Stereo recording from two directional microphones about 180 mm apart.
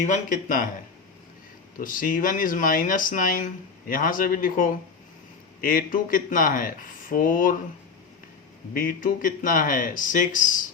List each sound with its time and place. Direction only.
0.0 s speech: 45° left (ahead or behind)
1.8 s speech: 50° left (ahead or behind)
8.7 s speech: 50° left (ahead or behind)